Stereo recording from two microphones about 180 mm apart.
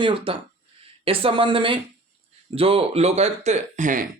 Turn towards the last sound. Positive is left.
turn(degrees=-45)  # may be behind; listen again after turning